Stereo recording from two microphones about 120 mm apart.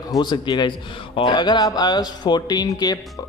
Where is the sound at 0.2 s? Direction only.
40° left (ahead or behind).